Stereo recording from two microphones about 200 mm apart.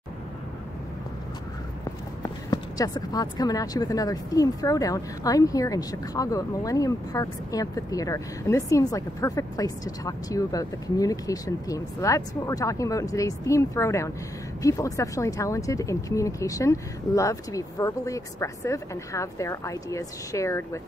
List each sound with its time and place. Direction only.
2.2 s speech: 20° left (ahead or behind)